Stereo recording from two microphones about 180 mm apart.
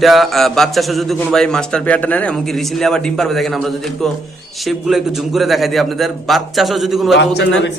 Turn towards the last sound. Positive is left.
turn(degrees=80)